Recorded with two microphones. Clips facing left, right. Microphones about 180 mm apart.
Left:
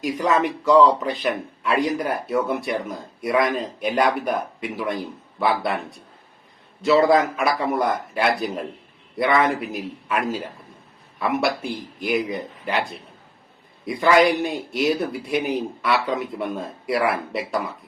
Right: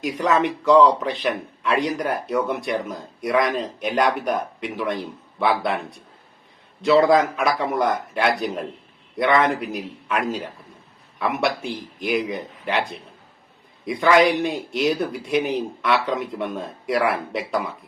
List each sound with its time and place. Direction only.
0.0 s speech: centre (ahead or behind)
6.8 s speech: centre (ahead or behind)
13.8 s speech: centre (ahead or behind)